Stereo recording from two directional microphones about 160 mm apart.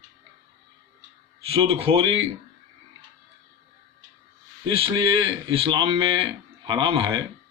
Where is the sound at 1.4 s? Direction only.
35° right (ahead or behind).